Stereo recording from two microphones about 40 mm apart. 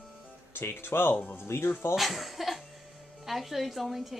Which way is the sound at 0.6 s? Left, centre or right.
Left.